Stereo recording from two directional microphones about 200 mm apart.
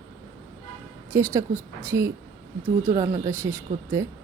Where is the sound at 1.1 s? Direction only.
15° right (ahead or behind).